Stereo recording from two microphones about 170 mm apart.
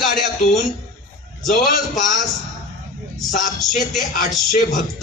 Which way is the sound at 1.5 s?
45° left (ahead or behind).